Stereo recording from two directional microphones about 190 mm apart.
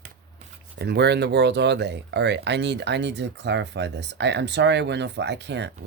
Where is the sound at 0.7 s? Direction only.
60° right (ahead or behind).